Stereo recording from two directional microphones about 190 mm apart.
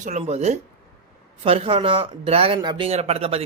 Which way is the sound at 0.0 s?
35° right (ahead or behind).